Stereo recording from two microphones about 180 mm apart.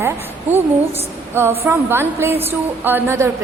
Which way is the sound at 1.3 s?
15° right (ahead or behind).